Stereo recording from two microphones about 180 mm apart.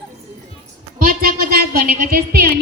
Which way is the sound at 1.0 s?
55° right (ahead or behind).